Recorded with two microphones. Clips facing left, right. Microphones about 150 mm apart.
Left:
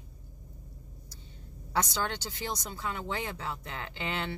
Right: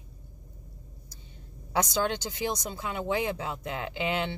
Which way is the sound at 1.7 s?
15° right (ahead or behind).